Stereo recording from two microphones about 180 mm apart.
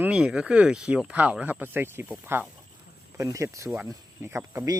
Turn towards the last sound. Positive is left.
turn(degrees=-20)  # may be behind; listen again after turning